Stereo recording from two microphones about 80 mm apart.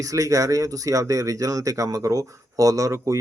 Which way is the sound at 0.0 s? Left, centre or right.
Right.